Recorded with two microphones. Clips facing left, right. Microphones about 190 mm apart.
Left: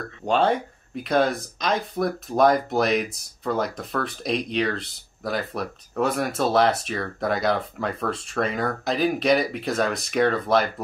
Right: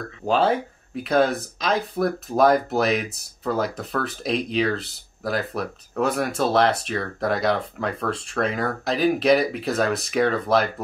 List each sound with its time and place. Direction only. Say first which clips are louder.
0.2 s speech: right 1 dB; 5° right (ahead or behind)